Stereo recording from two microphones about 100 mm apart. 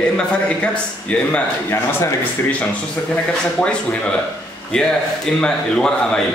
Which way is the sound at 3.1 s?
10° left (ahead or behind).